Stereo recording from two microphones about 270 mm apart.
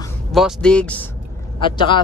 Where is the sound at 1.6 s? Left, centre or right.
Centre.